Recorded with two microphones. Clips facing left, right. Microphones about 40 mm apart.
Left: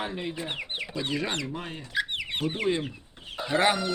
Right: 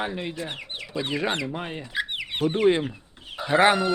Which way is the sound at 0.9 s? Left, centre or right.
Centre.